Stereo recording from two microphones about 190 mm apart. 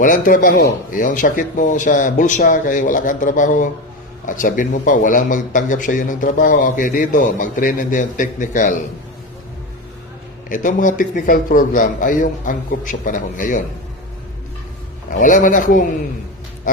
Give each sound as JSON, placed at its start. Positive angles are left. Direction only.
{"t": 0.0, "sound": "a man's voice", "side_deg": 45}
{"t": 10.5, "sound": "a man's voice", "side_deg": 45}
{"t": 15.1, "sound": "a man's voice", "side_deg": 45}